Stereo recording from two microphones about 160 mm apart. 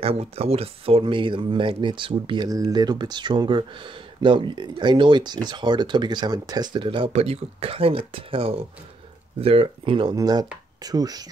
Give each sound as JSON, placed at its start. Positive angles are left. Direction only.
{"t": 0.0, "sound": "speech", "side_deg": -40}